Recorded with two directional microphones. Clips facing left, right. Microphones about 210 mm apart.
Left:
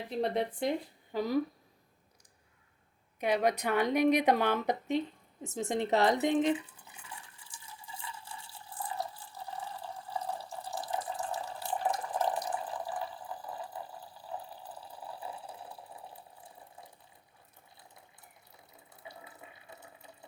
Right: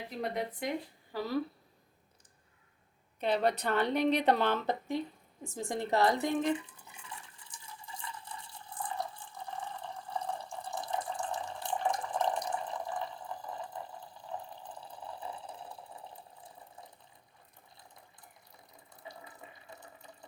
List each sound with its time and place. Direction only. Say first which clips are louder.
0.2 s speech: left 5 dB; 30° left (ahead or behind)
1.1 s a woman's voice: left 3 dB; 15° left (ahead or behind)
3.2 s a woman's voice: left 1 dB; 10° left (ahead or behind)
8.2 s water: right 1 dB; 5° left (ahead or behind)
14.5 s a sound: even; 5° left (ahead or behind)